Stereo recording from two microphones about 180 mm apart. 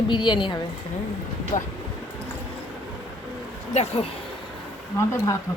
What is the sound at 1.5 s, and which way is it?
Speech, 45° left (ahead or behind).